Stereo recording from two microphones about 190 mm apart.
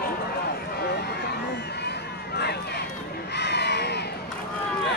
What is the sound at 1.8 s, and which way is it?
Crowd, 60° left (ahead or behind).